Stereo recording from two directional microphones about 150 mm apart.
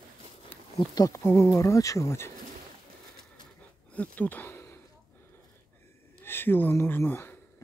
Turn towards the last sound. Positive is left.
turn(degrees=15)  # may be behind; listen again after turning